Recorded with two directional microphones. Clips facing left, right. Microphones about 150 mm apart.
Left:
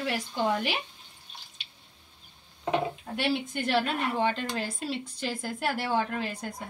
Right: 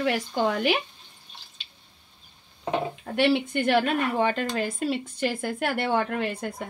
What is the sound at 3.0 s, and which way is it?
A woman's voice, 70° right (ahead or behind).